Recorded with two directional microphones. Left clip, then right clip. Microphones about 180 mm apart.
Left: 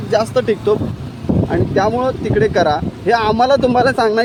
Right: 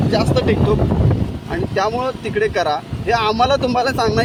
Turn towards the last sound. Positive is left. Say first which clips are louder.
# left 4 dB
turn(degrees=45)  # may be behind; listen again after turning